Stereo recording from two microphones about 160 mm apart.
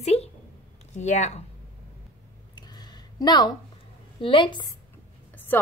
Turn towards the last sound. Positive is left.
turn(degrees=15)  # may be behind; listen again after turning